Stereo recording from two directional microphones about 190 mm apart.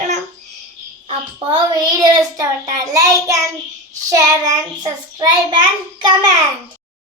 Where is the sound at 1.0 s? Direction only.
25° right (ahead or behind).